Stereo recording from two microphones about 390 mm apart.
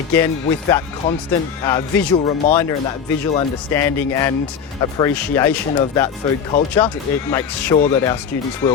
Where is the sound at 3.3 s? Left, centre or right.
Centre.